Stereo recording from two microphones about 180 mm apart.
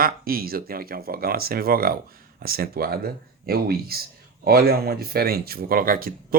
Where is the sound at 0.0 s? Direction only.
55° right (ahead or behind).